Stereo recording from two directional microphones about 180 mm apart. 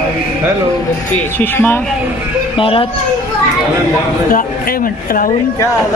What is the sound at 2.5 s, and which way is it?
Speech, 30° left (ahead or behind).